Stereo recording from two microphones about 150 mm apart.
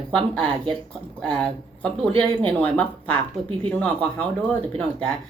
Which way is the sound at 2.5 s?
10° left (ahead or behind).